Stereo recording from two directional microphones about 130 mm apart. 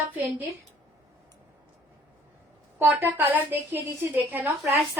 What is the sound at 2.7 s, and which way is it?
A woman's voice, 15° right (ahead or behind).